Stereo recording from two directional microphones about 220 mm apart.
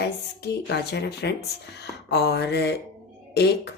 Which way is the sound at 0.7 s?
50° left (ahead or behind).